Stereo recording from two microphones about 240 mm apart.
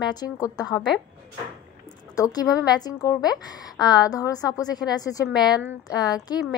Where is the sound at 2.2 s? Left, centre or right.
Centre.